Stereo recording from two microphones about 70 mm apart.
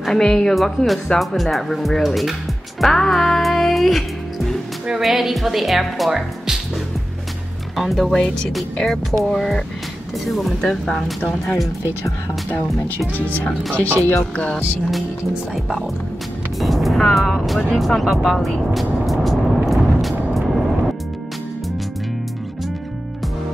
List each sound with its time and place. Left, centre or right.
0.0 s speech: centre
2.8 s music: centre
4.8 s speech: centre
7.7 s speech: centre
13.2 s speech: left
16.5 s speech: centre
17.7 s vehicle: centre